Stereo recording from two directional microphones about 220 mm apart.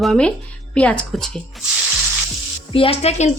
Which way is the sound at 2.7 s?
25° left (ahead or behind).